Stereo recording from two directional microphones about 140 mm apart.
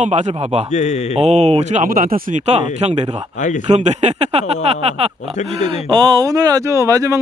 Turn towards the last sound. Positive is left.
turn(degrees=-25)  # may be behind; listen again after turning